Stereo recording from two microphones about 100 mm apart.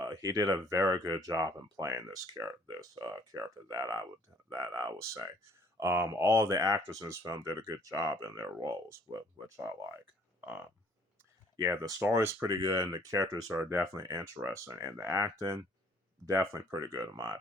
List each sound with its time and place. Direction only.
0.0 s speech: 35° right (ahead or behind)
11.6 s speech: 35° right (ahead or behind)
12.0 s speech: 25° right (ahead or behind)